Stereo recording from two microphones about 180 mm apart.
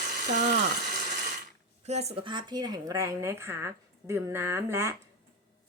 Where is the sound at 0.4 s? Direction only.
70° right (ahead or behind).